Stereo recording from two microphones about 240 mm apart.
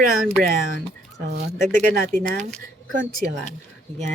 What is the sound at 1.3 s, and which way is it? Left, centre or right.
Speech, right.